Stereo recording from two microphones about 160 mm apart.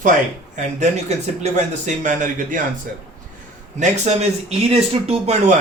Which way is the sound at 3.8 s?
45° right (ahead or behind).